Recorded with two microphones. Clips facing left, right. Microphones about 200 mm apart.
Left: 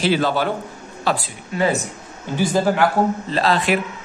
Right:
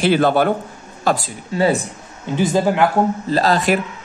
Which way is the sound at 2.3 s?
20° right (ahead or behind).